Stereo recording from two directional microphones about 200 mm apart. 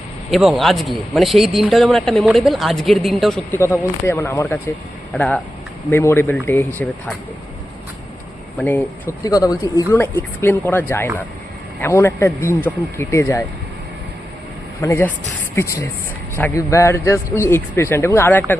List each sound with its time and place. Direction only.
0.3 s speech: centre (ahead or behind)
3.6 s a man's voice: 15° left (ahead or behind)
8.5 s a man's voice: 10° left (ahead or behind)
14.8 s a man's voice: 10° left (ahead or behind)